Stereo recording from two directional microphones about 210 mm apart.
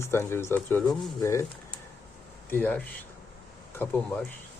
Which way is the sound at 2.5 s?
10° left (ahead or behind).